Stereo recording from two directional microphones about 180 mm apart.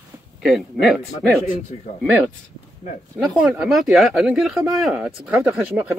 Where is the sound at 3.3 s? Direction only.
Centre (ahead or behind).